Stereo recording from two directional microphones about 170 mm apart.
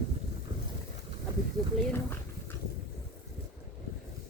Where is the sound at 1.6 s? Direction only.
5° left (ahead or behind).